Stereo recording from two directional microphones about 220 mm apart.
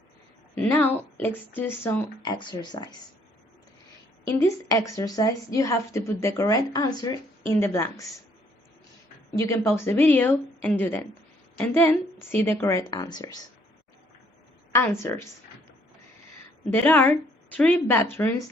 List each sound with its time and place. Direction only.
0.5 s a woman's voice: 5° left (ahead or behind)
4.4 s a woman's voice: 15° left (ahead or behind)
9.4 s a woman's voice: 15° left (ahead or behind)
14.7 s a woman's voice: 10° left (ahead or behind)
16.6 s a woman's voice: 10° left (ahead or behind)